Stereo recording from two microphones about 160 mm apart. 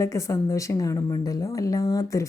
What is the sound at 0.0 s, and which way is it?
Speech, 20° left (ahead or behind).